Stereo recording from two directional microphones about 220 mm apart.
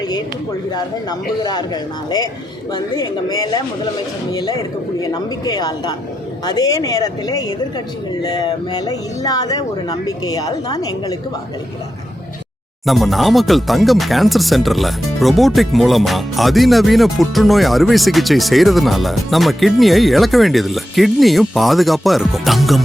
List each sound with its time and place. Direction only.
1.4 s speech: 20° left (ahead or behind)
12.8 s speech: centre (ahead or behind)